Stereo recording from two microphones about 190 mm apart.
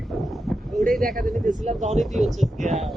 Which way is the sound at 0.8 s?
45° right (ahead or behind).